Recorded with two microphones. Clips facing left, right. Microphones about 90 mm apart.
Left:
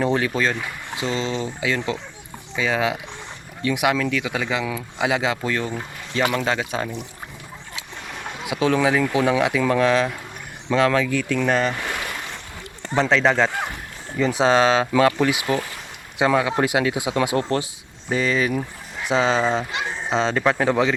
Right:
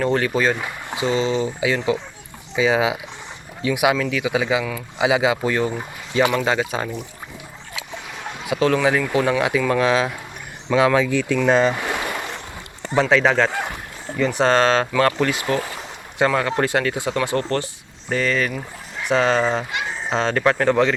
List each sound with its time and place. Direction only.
0.0 s speech: 5° left (ahead or behind); by 6.2 s 15° right (ahead or behind)
6.3 s speech: 5° right (ahead or behind)
8.1 s speech: 5° left (ahead or behind); by 11.7 s 20° right (ahead or behind)
13.0 s speech: 5° right (ahead or behind)